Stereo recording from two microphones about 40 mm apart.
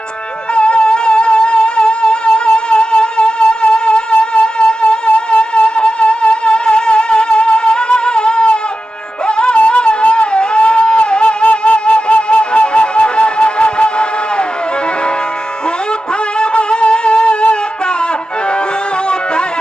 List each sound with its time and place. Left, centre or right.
0.5 s music: left
16.4 s wind instrument: left
19.0 s music: left